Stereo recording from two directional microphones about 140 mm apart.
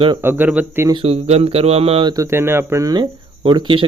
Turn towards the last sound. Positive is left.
turn(degrees=-35)  # may be behind; listen again after turning